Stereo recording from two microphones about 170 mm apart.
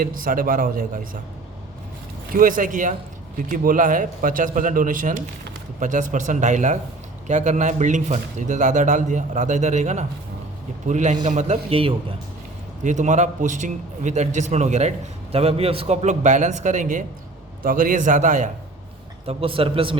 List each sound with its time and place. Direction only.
0.0 s a man's voice: 55° right (ahead or behind)
2.3 s a man's voice: 50° right (ahead or behind); by 11.9 s 35° right (ahead or behind)
12.8 s a man's voice: 45° right (ahead or behind)
19.2 s a man's voice: 35° right (ahead or behind)